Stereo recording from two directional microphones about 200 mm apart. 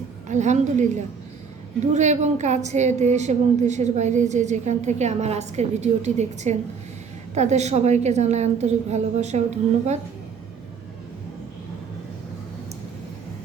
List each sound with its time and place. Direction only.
0.3 s a woman's voice: 35° right (ahead or behind)
1.9 s a woman's voice: 35° right (ahead or behind)